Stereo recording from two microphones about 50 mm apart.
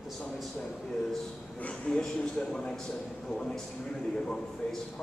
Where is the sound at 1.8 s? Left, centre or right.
Centre.